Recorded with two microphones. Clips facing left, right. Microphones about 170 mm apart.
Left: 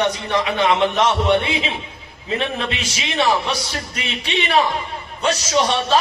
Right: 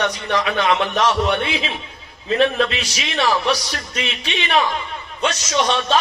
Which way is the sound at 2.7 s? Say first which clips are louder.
Left 1 dB; 25° left (ahead or behind).